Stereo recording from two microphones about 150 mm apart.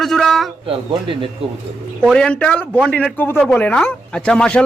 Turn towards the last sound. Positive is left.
turn(degrees=5)  # may be behind; listen again after turning